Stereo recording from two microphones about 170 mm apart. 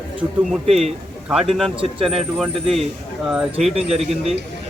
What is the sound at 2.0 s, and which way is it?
Speech, centre (ahead or behind).